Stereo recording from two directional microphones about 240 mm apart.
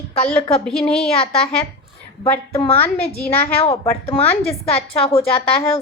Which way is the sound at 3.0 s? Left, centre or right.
Left.